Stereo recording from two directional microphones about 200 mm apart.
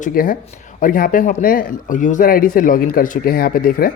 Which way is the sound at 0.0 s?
45° left (ahead or behind).